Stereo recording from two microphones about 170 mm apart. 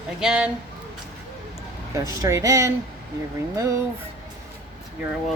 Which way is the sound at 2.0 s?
20° right (ahead or behind).